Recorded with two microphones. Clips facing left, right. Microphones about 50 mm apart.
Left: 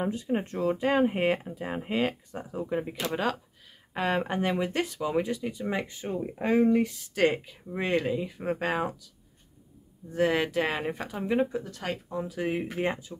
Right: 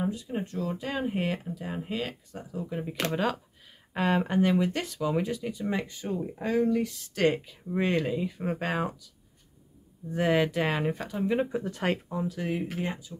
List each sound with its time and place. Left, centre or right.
0.0 s speech: left
3.9 s speech: centre
4.3 s speech: centre
5.8 s speech: centre
6.8 s speech: centre
10.1 s speech: centre
11.6 s speech: right
12.4 s speech: left